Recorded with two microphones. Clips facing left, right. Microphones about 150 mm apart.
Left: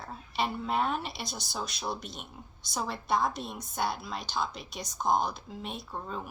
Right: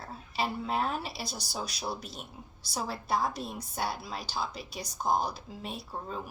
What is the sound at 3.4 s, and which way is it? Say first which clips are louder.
Speech: even; centre (ahead or behind).